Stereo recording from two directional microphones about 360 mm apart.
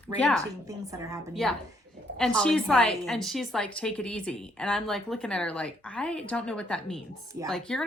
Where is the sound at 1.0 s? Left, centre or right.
Centre.